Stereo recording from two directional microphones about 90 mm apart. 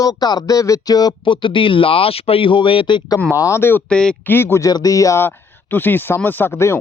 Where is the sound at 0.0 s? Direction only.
45° left (ahead or behind).